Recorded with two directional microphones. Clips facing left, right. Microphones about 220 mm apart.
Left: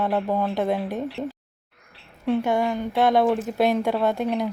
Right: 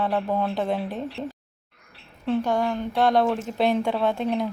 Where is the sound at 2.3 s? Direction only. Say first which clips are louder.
Left 1 dB; 10° left (ahead or behind).